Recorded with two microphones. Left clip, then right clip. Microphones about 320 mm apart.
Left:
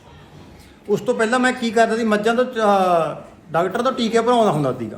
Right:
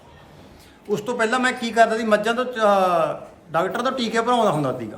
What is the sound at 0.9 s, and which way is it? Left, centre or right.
A man's voice, centre.